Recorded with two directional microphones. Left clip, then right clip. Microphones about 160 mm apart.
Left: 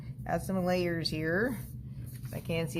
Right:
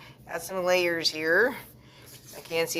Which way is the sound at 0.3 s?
20° right (ahead or behind).